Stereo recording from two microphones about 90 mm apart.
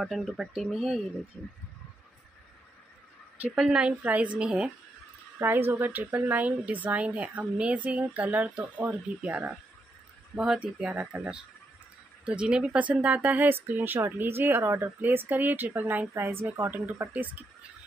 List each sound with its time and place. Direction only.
0.0 s speech: centre (ahead or behind)
3.5 s speech: 5° right (ahead or behind)
5.4 s speech: 25° right (ahead or behind)